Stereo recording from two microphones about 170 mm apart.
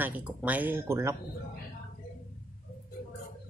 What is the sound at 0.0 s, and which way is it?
Speech, 10° right (ahead or behind).